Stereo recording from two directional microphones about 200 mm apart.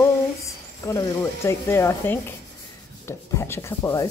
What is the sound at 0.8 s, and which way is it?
Speech, 15° left (ahead or behind).